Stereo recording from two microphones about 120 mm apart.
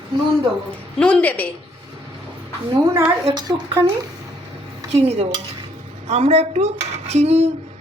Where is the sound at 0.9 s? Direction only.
10° left (ahead or behind).